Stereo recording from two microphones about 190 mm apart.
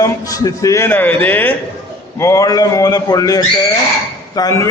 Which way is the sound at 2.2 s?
15° left (ahead or behind).